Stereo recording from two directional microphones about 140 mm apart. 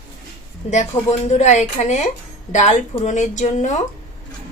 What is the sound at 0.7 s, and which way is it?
Speech, 55° left (ahead or behind).